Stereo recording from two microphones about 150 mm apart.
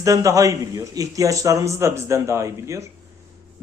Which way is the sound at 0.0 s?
20° right (ahead or behind).